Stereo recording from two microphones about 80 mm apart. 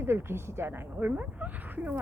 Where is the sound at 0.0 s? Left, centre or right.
Right.